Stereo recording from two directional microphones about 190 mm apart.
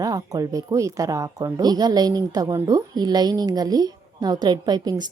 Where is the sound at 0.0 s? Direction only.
20° right (ahead or behind).